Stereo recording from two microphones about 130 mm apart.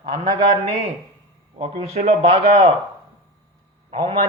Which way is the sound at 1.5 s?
45° right (ahead or behind).